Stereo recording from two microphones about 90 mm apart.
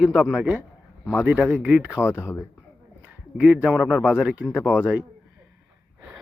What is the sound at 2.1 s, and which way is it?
Speech, 30° left (ahead or behind).